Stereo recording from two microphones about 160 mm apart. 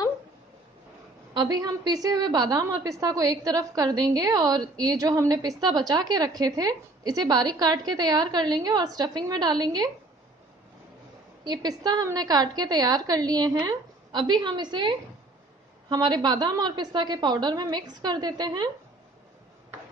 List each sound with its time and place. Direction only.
1.3 s a woman's voice: 25° right (ahead or behind)
11.4 s a woman's voice: 25° right (ahead or behind)